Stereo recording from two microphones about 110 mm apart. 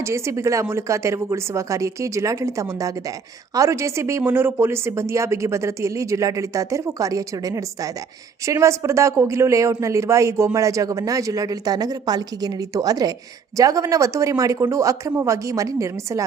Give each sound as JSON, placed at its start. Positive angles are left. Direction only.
{"t": 0.0, "sound": "speech", "side_deg": -25}